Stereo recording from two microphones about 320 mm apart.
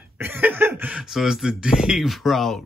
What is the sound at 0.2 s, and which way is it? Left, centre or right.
Speech, centre.